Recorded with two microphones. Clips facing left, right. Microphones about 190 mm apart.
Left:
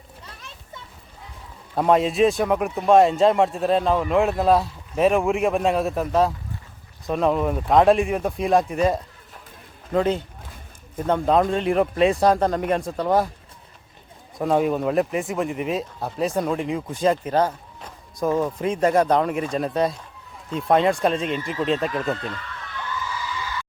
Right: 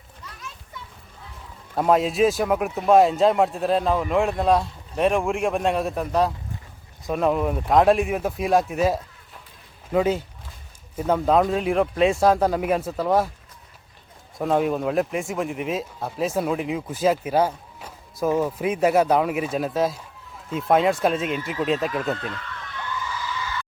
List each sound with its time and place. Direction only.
0.3 s children playing: 30° left (ahead or behind)
1.7 s a man's voice: centre (ahead or behind)
14.3 s speech: centre (ahead or behind)